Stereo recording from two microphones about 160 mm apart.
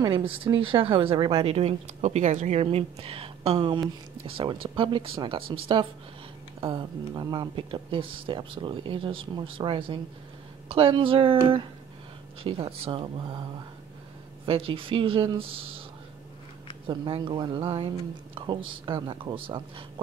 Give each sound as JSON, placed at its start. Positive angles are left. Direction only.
{"t": 0.0, "sound": "speech", "side_deg": -35}
{"t": 2.0, "sound": "speech", "side_deg": -50}
{"t": 14.4, "sound": "speech", "side_deg": -35}
{"t": 16.8, "sound": "speech", "side_deg": -30}